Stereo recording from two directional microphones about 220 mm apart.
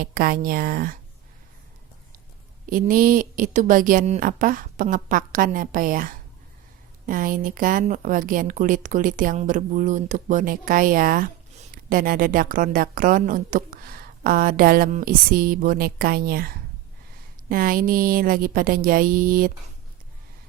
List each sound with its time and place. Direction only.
0.0 s a woman's voice: 40° right (ahead or behind)
2.6 s a woman's voice: 40° right (ahead or behind)